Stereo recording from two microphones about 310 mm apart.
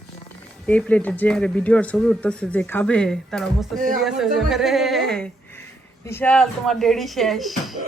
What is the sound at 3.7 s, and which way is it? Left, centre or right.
Speech, right.